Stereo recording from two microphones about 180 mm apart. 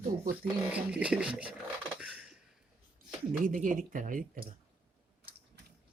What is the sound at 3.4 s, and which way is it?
Speech, 50° right (ahead or behind).